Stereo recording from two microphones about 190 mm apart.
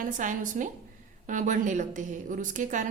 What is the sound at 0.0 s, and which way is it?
Speech, 45° right (ahead or behind).